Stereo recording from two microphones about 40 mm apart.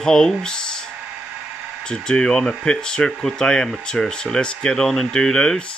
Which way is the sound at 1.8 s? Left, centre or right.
Centre.